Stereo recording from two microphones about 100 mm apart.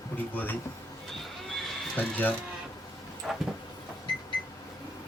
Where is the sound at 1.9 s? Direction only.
20° left (ahead or behind).